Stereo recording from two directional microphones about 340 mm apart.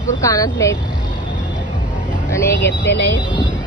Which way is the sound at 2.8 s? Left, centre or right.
Left.